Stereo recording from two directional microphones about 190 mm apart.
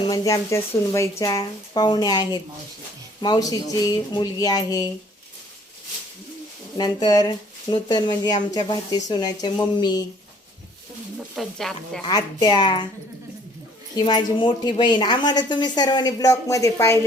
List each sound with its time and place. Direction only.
0.1 s a woman's voice: 15° left (ahead or behind)
6.7 s a woman's voice: 20° left (ahead or behind)
11.3 s speech: centre (ahead or behind)
12.0 s a woman's voice: 20° left (ahead or behind)
13.9 s a woman's voice: 20° left (ahead or behind)